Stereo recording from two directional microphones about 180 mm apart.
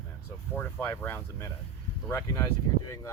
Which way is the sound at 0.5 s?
10° left (ahead or behind).